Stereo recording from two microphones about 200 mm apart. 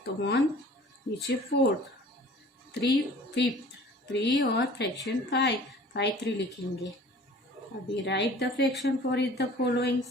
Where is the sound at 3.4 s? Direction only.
60° left (ahead or behind).